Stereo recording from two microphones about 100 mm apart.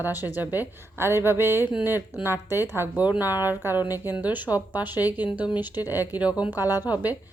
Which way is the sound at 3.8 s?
40° left (ahead or behind).